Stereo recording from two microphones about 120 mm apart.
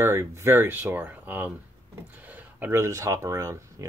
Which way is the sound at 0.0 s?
20° right (ahead or behind).